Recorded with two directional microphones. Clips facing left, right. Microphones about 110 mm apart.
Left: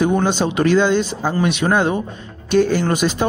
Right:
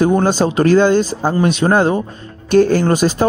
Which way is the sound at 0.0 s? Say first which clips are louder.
Right 3 dB; 40° right (ahead or behind).